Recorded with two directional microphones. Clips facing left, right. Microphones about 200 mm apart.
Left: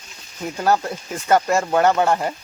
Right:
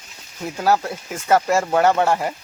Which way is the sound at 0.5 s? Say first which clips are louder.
Even; 5° right (ahead or behind).